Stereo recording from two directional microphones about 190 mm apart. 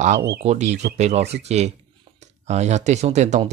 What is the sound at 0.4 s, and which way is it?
Speech, 35° right (ahead or behind).